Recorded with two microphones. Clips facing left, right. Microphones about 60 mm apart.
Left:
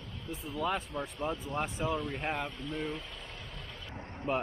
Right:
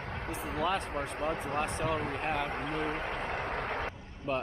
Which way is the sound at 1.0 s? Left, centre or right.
Right.